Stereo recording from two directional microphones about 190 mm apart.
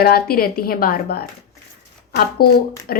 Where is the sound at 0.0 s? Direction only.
50° left (ahead or behind).